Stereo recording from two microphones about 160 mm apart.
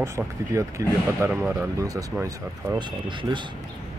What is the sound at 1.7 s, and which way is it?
Speech, 20° right (ahead or behind).